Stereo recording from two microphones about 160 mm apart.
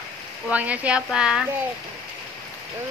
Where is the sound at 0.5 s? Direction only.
10° right (ahead or behind).